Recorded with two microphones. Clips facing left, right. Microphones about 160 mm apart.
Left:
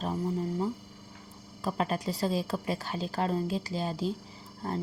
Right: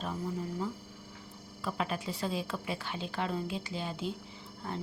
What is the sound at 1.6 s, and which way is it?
Speech, 40° left (ahead or behind).